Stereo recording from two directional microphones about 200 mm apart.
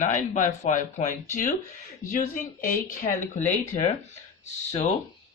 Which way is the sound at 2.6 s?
40° left (ahead or behind).